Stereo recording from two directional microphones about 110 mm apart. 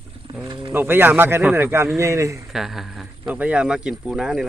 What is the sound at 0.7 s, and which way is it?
Speech, 20° right (ahead or behind).